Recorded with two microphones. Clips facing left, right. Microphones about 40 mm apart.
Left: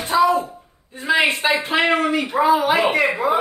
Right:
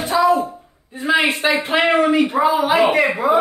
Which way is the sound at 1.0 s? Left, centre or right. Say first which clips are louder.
Right 1 dB; right.